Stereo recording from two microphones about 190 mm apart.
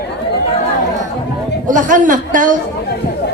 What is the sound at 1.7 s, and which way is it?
Speech, 45° right (ahead or behind).